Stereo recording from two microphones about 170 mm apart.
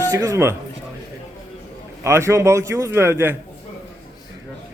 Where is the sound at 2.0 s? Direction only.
15° right (ahead or behind).